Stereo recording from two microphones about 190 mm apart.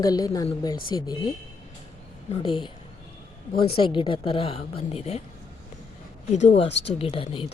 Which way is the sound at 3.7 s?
25° left (ahead or behind).